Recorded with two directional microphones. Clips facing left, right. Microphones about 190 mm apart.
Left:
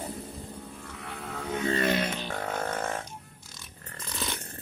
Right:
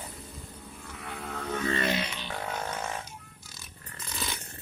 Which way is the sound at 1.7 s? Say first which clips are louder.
Left 5 dB; 50° left (ahead or behind).